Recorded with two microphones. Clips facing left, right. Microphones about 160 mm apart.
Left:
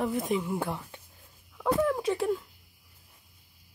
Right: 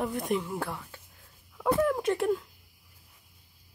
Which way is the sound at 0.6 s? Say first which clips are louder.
Left 2 dB; 20° left (ahead or behind).